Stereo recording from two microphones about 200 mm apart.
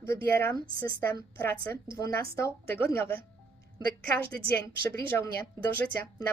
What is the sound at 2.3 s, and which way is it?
Speech, 15° left (ahead or behind).